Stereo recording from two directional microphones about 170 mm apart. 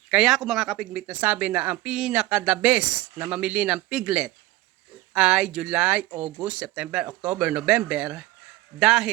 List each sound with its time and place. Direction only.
0.1 s speech: centre (ahead or behind)